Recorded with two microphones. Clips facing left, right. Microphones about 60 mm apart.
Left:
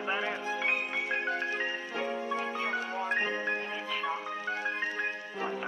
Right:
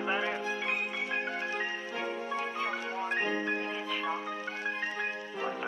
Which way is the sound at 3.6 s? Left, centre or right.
Centre.